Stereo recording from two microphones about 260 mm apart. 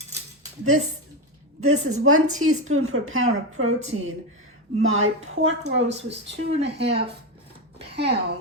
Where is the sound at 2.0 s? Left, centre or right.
Right.